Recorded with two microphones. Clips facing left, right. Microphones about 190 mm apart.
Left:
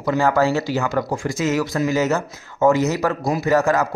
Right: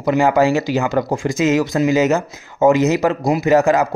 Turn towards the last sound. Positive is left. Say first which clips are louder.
# right 4 dB
turn(degrees=-15)  # may be behind; listen again after turning